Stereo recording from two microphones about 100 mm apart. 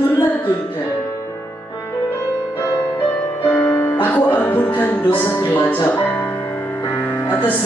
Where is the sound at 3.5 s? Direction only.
15° left (ahead or behind).